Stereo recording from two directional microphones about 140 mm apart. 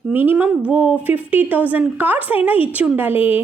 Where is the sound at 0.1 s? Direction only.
15° right (ahead or behind).